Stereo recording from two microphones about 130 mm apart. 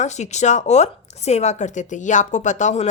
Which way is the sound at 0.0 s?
65° left (ahead or behind).